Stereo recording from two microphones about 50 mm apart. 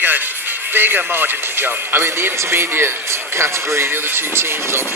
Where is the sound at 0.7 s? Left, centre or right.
Right.